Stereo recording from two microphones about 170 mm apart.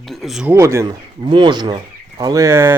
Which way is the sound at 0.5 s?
15° right (ahead or behind).